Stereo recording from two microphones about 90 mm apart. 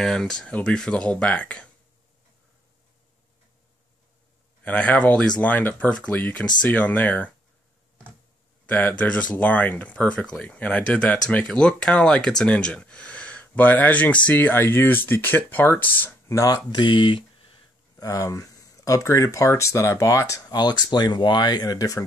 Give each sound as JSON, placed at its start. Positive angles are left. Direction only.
{"t": 0.0, "sound": "speech", "side_deg": 5}
{"t": 4.6, "sound": "speech", "side_deg": 15}
{"t": 8.6, "sound": "speech", "side_deg": 15}
{"t": 16.4, "sound": "speech", "side_deg": 50}
{"t": 17.9, "sound": "speech", "side_deg": 40}